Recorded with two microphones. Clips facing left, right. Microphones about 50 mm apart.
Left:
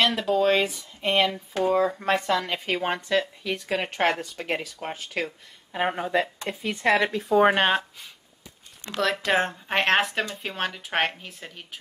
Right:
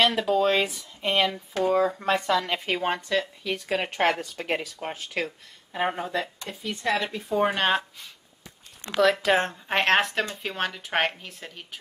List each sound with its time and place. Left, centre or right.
0.3 s speech: centre
3.1 s speech: centre
3.5 s speech: centre
6.4 s speech: left
7.1 s speech: left
9.0 s speech: centre